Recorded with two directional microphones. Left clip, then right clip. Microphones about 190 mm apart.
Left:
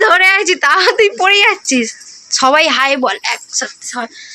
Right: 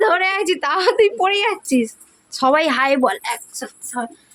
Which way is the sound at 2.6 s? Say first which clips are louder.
Left 5 dB; 20° right (ahead or behind).